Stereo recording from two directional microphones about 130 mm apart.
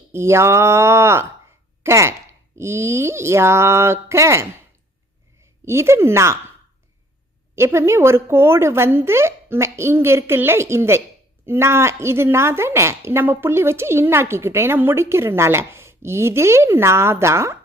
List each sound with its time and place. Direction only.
0.1 s a woman's voice: 20° right (ahead or behind)
5.6 s a woman's voice: 20° right (ahead or behind)
7.5 s a woman's voice: 20° right (ahead or behind)